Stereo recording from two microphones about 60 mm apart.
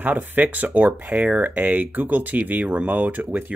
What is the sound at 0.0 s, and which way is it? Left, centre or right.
Speech, right.